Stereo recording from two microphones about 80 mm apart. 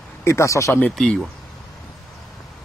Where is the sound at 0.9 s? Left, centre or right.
Centre.